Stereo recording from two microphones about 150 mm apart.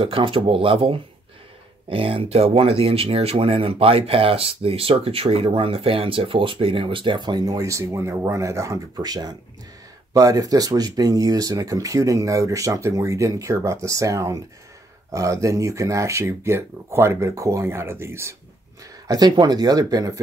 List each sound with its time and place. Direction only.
0.0 s speech: 35° right (ahead or behind)